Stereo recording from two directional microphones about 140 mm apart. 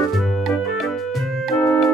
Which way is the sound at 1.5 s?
20° left (ahead or behind).